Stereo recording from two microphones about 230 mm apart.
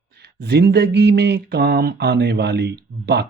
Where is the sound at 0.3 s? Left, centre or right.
Right.